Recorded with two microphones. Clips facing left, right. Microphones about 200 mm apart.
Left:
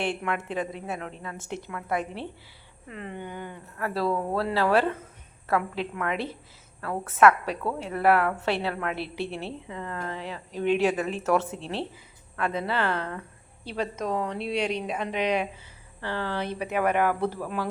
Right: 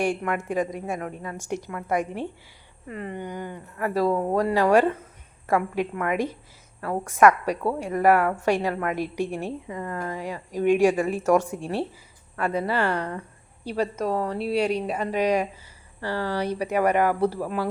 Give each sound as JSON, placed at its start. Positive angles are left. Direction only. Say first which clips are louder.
{"t": 0.3, "sound": "a woman's voice", "louder": "right 4 dB", "side_deg": -10}
{"t": 1.4, "sound": "a woman's voice", "louder": "right 7 dB", "side_deg": -45}
{"t": 1.7, "sound": "a woman's voice", "louder": "right 3 dB", "side_deg": -10}